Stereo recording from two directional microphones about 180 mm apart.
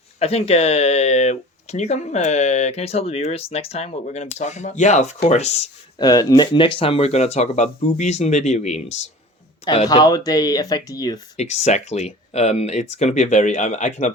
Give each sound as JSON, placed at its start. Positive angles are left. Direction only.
{"t": 0.2, "sound": "speech", "side_deg": 35}
{"t": 6.0, "sound": "speech", "side_deg": 20}
{"t": 9.9, "sound": "speech", "side_deg": 20}
{"t": 11.3, "sound": "speech", "side_deg": 40}